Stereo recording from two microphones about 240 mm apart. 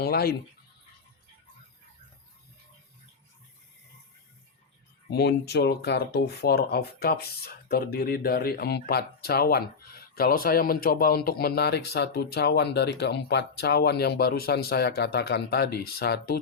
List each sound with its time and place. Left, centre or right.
0.0 s speech: left
5.0 s speech: left